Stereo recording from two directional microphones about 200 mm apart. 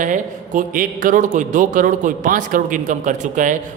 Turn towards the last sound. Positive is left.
turn(degrees=-40)  # may be behind; listen again after turning